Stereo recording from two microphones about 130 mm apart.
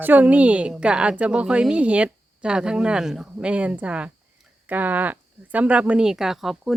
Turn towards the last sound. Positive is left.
turn(degrees=0)  # may be behind; listen again after turning